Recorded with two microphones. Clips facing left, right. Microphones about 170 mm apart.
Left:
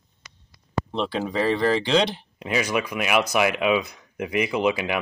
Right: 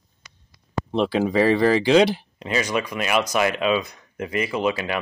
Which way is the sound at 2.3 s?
10° left (ahead or behind).